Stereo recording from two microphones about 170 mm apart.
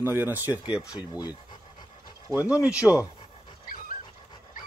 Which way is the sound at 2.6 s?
10° right (ahead or behind).